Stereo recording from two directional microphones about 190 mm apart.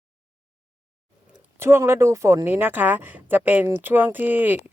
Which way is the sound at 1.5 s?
10° right (ahead or behind).